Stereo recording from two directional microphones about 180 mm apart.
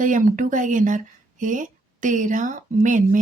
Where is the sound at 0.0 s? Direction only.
45° right (ahead or behind).